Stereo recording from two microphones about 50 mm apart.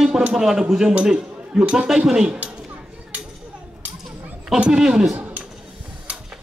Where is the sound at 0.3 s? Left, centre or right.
Centre.